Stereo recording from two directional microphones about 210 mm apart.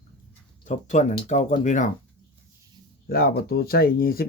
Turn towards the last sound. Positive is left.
turn(degrees=45)  # may be behind; listen again after turning